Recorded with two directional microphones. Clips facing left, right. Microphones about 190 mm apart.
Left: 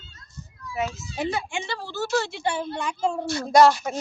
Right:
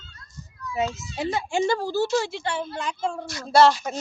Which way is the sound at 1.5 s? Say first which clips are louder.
Right 9 dB; 45° right (ahead or behind).